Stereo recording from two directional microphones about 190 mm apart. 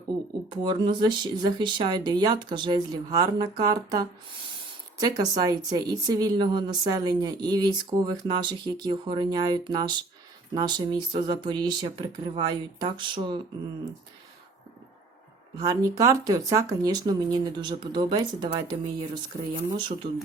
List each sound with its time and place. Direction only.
0.5 s a woman's voice: 25° right (ahead or behind)
15.5 s a woman's voice: 20° right (ahead or behind)